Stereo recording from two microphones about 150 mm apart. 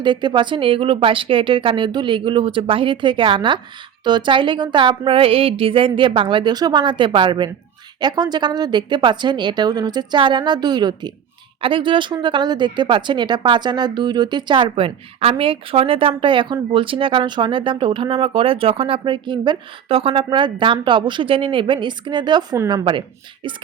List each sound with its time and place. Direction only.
0.0 s a woman's voice: 30° right (ahead or behind)